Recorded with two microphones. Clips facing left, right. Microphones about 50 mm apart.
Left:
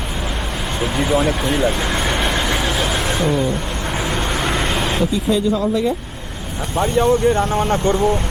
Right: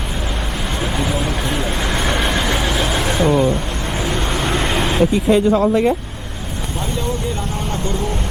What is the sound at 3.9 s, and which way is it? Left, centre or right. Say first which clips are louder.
Vehicle: even; left.